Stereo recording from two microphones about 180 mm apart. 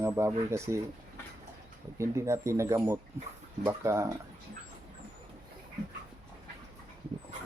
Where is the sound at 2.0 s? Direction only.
15° right (ahead or behind).